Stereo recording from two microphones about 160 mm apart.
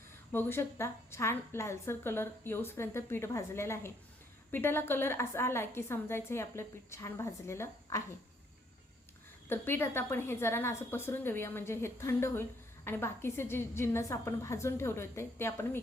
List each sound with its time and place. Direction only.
0.3 s a woman's voice: 15° left (ahead or behind)
9.5 s a woman's voice: 15° left (ahead or behind)